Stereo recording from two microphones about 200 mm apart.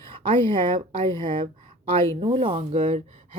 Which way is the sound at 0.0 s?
25° right (ahead or behind).